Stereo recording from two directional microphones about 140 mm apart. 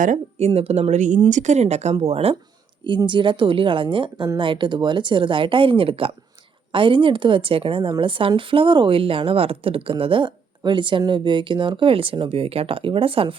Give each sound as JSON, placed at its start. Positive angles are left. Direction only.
{"t": 0.0, "sound": "speech", "side_deg": -55}
{"t": 2.8, "sound": "a woman's voice", "side_deg": -35}